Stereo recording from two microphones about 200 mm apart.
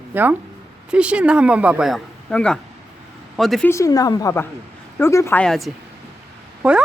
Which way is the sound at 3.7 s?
15° left (ahead or behind).